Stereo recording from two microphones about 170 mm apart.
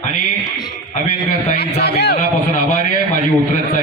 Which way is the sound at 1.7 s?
75° left (ahead or behind).